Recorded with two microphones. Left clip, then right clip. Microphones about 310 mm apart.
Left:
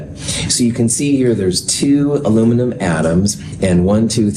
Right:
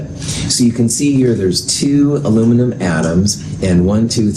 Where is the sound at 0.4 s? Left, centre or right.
Left.